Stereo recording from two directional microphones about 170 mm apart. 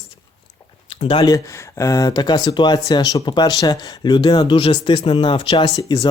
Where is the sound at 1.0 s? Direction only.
25° left (ahead or behind).